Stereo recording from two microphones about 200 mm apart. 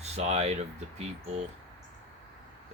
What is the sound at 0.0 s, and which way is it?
Speech, 35° right (ahead or behind).